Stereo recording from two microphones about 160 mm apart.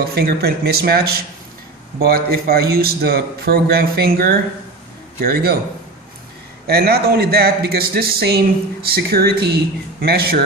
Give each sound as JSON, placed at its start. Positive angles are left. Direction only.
{"t": 0.1, "sound": "a man's voice", "side_deg": -80}
{"t": 6.7, "sound": "a man's voice", "side_deg": -75}